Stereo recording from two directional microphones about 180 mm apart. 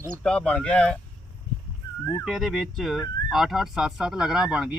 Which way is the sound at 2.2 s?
Centre (ahead or behind).